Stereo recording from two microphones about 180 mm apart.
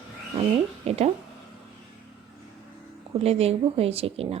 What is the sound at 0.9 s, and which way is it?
Speech, 35° right (ahead or behind).